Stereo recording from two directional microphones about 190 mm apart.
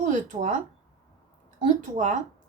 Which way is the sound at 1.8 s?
40° right (ahead or behind).